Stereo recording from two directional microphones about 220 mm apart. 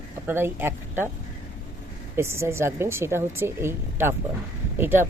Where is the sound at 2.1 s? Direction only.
10° right (ahead or behind).